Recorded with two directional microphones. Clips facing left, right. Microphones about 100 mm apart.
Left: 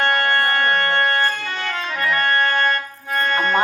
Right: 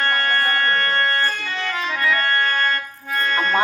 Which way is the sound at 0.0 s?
30° left (ahead or behind).